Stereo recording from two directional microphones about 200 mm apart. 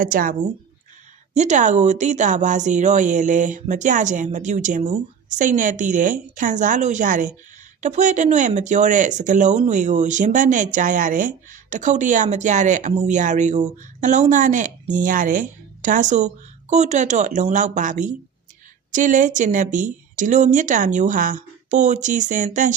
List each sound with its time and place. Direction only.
0.0 s speech: 45° right (ahead or behind)